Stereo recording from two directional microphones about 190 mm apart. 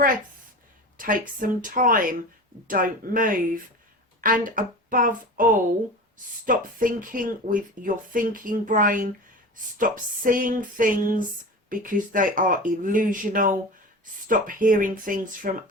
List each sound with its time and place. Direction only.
0.9 s a woman's voice: 45° right (ahead or behind)